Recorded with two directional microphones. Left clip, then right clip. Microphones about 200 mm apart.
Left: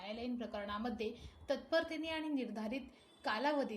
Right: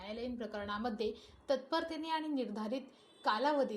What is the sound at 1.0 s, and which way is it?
Speech, 20° right (ahead or behind).